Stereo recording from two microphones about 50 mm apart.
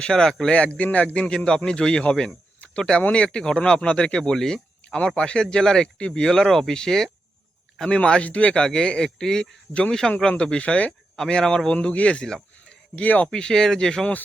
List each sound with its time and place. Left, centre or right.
0.0 s speech: centre
0.8 s speech: left
1.5 s speech: centre
6.2 s speech: centre; by 8.6 s left
8.6 s speech: centre
11.3 s speech: centre
11.7 s speech: left
13.2 s speech: centre